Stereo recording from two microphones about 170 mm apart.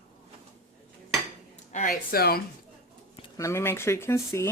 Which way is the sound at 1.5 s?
45° left (ahead or behind).